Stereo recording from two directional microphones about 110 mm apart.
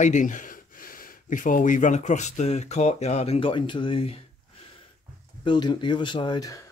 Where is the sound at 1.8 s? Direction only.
90° left; by 4.2 s 55° left (ahead or behind).